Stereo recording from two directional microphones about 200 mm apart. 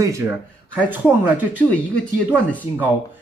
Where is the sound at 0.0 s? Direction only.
15° right (ahead or behind).